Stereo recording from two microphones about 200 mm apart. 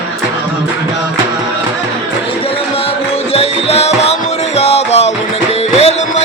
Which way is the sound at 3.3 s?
30° left (ahead or behind).